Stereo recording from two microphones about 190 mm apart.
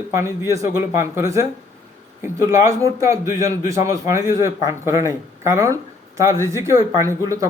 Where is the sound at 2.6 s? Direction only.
15° right (ahead or behind).